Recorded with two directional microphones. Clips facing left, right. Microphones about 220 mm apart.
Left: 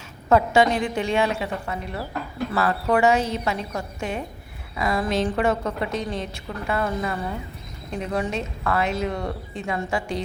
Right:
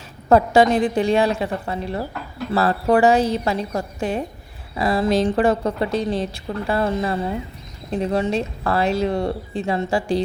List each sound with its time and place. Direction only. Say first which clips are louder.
0.3 s a woman's voice: right 4 dB; 35° right (ahead or behind)